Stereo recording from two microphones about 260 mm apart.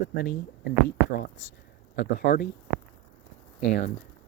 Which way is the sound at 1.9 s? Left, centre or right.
Left.